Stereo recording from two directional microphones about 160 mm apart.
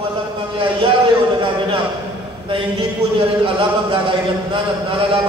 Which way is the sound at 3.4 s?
30° right (ahead or behind).